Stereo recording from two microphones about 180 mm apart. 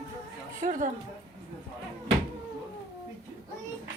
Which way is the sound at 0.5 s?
45° right (ahead or behind).